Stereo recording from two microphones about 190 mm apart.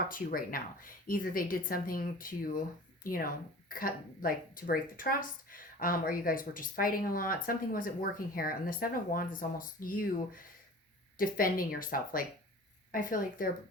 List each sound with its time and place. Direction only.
0.1 s a woman's voice: 50° left (ahead or behind)